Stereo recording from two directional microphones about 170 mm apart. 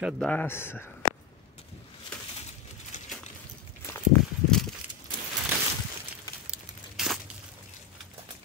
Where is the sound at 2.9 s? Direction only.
45° left (ahead or behind).